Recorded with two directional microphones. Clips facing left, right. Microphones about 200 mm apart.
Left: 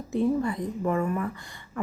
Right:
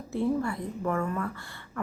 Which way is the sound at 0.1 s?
15° left (ahead or behind).